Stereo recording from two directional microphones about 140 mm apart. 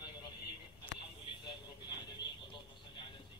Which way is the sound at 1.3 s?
35° left (ahead or behind).